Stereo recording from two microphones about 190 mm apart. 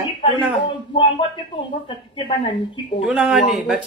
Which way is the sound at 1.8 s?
25° left (ahead or behind).